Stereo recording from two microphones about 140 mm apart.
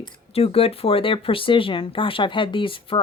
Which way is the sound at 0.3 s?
45° left (ahead or behind).